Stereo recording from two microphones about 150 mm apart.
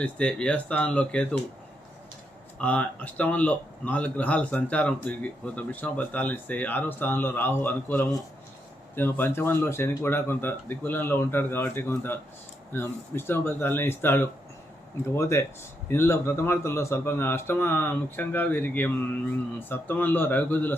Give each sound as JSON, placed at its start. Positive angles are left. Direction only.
{"t": 0.0, "sound": "speech", "side_deg": 5}
{"t": 2.6, "sound": "speech", "side_deg": 10}